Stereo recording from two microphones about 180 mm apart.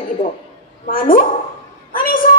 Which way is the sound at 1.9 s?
50° left (ahead or behind).